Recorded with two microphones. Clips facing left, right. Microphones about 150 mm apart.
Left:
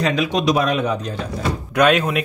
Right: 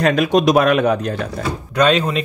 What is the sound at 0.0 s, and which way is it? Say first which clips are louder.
Speech: right 5 dB; 50° right (ahead or behind).